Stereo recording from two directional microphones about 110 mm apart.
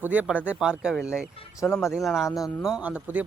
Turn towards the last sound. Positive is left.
turn(degrees=-15)  # may be behind; listen again after turning